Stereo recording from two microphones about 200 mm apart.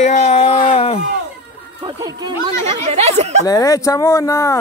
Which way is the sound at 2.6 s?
30° right (ahead or behind).